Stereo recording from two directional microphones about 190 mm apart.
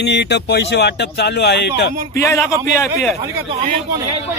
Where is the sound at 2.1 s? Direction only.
15° left (ahead or behind).